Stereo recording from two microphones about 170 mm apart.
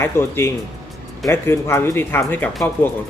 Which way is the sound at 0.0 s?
15° left (ahead or behind).